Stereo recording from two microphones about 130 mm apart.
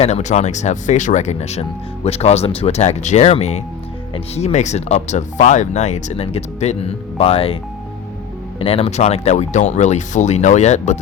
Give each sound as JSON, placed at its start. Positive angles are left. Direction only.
{"t": 0.0, "sound": "speech", "side_deg": 60}